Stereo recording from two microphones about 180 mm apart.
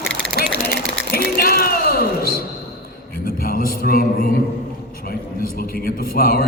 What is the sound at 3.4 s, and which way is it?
Mantra, 55° left (ahead or behind).